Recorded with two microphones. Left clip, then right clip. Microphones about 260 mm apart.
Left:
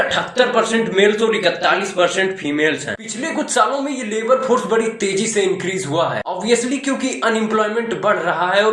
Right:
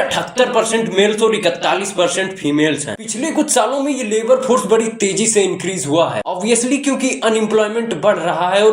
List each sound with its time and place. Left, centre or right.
0.1 s speech: right
4.1 s speech: right